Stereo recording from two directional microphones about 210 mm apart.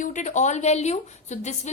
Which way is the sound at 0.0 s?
35° left (ahead or behind).